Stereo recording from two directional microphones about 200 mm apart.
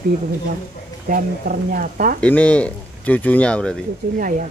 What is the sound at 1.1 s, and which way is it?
Speech, 45° right (ahead or behind).